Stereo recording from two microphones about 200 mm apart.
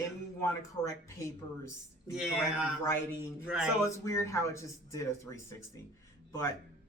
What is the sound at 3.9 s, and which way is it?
Speech, 15° left (ahead or behind).